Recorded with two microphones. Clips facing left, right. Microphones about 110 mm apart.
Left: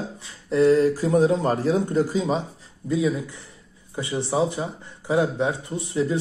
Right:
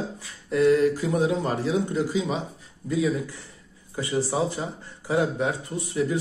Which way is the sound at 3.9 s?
20° left (ahead or behind).